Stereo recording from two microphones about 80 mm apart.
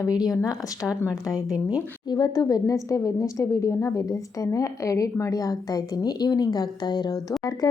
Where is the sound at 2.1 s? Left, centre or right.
Left.